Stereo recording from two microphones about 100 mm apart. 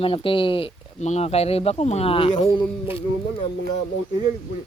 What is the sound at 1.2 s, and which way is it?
Speech, 90° left.